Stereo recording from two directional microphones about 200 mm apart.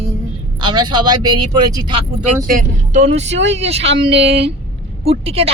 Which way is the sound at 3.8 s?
60° right (ahead or behind).